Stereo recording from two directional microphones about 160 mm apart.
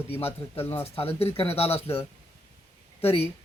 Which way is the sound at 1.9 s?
15° left (ahead or behind).